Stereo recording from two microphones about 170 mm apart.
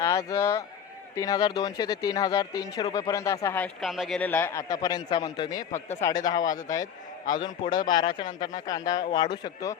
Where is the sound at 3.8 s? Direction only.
Centre (ahead or behind).